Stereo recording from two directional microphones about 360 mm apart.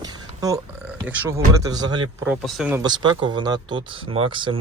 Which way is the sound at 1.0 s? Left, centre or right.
Centre.